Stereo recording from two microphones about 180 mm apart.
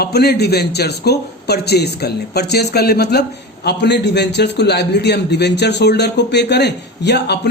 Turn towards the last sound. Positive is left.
turn(degrees=70)  # may be behind; listen again after turning